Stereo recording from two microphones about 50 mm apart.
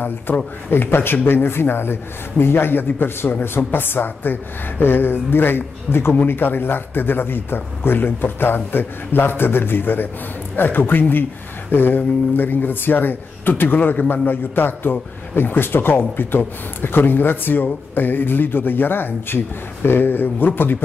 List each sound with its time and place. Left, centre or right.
0.7 s speech: left